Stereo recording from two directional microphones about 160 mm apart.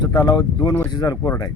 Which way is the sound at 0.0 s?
25° left (ahead or behind).